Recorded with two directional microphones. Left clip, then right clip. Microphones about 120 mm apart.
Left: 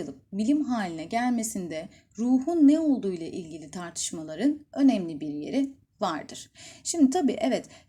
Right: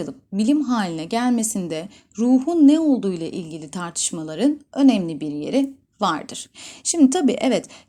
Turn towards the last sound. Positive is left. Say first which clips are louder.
# right 6 dB
turn(degrees=-25)  # may be behind; listen again after turning